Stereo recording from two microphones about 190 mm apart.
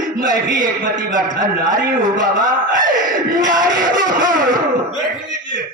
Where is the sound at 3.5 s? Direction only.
45° right (ahead or behind).